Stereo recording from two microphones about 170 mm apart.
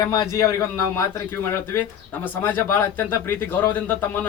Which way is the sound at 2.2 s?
10° left (ahead or behind).